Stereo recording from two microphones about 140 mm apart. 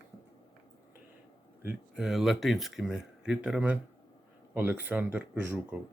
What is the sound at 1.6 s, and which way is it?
Speech, 5° right (ahead or behind).